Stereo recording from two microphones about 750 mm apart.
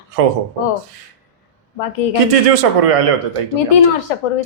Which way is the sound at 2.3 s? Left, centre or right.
Right.